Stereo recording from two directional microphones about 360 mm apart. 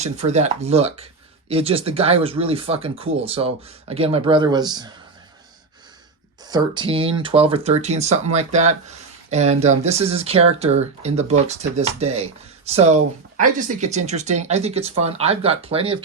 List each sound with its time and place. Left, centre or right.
0.0 s speech: centre
6.4 s speech: centre